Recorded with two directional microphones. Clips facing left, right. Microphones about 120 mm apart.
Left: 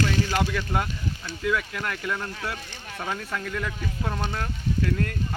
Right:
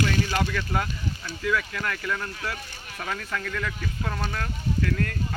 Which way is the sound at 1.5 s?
15° left (ahead or behind).